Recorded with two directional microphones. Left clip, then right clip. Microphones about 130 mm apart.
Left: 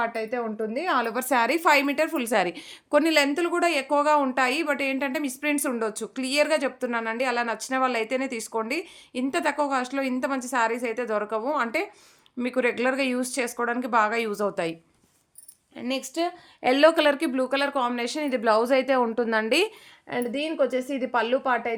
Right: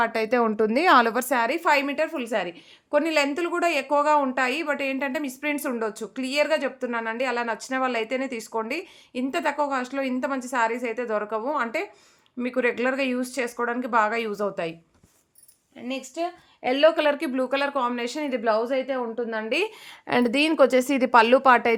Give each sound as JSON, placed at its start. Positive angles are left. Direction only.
{"t": 0.3, "sound": "speech", "side_deg": -90}
{"t": 1.3, "sound": "a woman's voice", "side_deg": 15}
{"t": 2.9, "sound": "a woman's voice", "side_deg": 15}
{"t": 3.2, "sound": "a woman's voice", "side_deg": 0}
{"t": 15.8, "sound": "a woman's voice", "side_deg": 35}
{"t": 17.2, "sound": "a woman's voice", "side_deg": 5}
{"t": 18.6, "sound": "a woman's voice", "side_deg": 60}
{"t": 20.1, "sound": "a woman's voice", "side_deg": -75}